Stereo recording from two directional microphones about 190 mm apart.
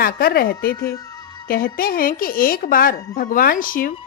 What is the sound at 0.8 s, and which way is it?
Speech, 20° left (ahead or behind).